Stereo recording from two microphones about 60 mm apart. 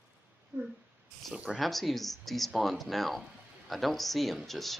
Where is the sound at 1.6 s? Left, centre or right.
Centre.